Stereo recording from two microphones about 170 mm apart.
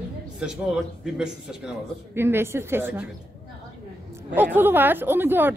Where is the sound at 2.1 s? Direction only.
15° right (ahead or behind).